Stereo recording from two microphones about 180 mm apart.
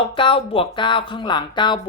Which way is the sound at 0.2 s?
30° left (ahead or behind).